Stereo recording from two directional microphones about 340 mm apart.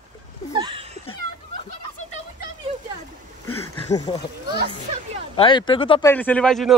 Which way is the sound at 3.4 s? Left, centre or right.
Left.